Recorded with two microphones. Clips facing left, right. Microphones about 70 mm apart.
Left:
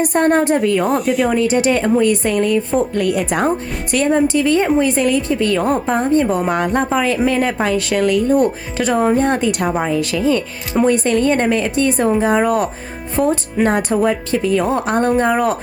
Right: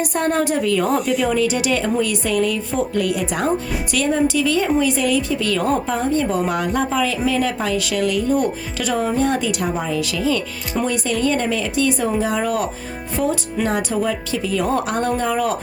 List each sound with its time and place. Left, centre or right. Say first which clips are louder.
0.0 s speech: left 5 dB; left
0.6 s speech: left 3 dB; left
0.9 s speech: left 3 dB; centre
1.3 s speech: left 4 dB; left
2.9 s speech: left 3 dB; left
5.6 s a woman's voice: left 3 dB; left
6.7 s speech: left 4 dB; left
14.8 s speech: left 5 dB; left